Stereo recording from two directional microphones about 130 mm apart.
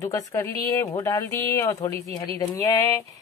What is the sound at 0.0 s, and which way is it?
A woman's voice, 25° left (ahead or behind).